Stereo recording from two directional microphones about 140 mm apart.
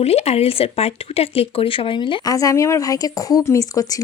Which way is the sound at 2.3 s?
25° left (ahead or behind).